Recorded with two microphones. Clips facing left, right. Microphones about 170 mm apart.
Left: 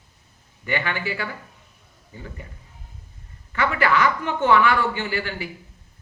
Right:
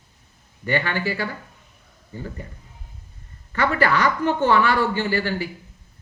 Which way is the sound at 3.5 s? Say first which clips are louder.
Right 1 dB; 40° right (ahead or behind).